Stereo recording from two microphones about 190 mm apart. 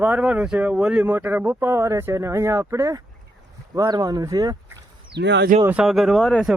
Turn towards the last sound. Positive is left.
turn(degrees=0)  # may be behind; listen again after turning